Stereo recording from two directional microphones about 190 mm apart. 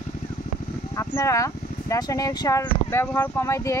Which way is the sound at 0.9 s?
15° left (ahead or behind).